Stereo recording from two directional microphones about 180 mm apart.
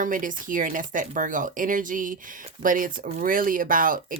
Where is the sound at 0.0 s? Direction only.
50° right (ahead or behind).